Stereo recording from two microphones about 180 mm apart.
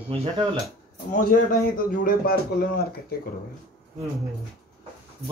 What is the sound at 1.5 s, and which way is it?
Speech, 50° left (ahead or behind).